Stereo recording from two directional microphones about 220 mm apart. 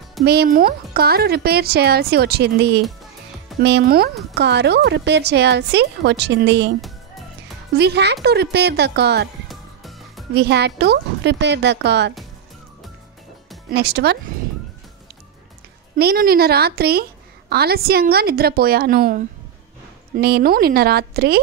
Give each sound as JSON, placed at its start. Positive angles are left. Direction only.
{"t": 0.2, "sound": "speech", "side_deg": -45}
{"t": 7.7, "sound": "speech", "side_deg": -50}
{"t": 9.5, "sound": "music", "side_deg": 0}
{"t": 10.3, "sound": "speech", "side_deg": -50}
{"t": 13.7, "sound": "speech", "side_deg": -45}
{"t": 16.0, "sound": "speech", "side_deg": -45}